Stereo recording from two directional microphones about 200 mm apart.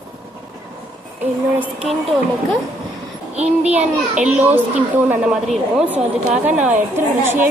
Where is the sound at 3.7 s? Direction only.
5° right (ahead or behind).